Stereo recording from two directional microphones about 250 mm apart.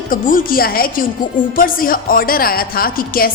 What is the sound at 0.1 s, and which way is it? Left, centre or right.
A woman's voice, left.